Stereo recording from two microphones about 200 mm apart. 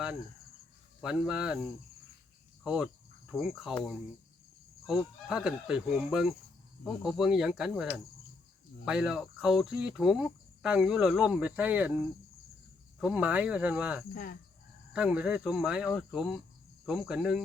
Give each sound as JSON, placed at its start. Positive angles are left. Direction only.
{"t": 1.0, "sound": "cricket", "side_deg": -5}
{"t": 2.6, "sound": "cricket", "side_deg": -5}
{"t": 13.0, "sound": "cricket", "side_deg": -5}
{"t": 14.1, "sound": "cricket", "side_deg": 45}
{"t": 14.9, "sound": "cricket", "side_deg": -5}